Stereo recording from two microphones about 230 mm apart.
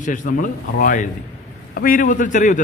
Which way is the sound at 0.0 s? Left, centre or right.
Left.